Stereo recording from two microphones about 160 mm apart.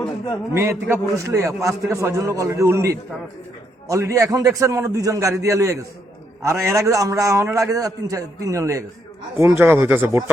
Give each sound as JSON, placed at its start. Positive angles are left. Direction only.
{"t": 0.5, "sound": "a man's voice", "side_deg": -15}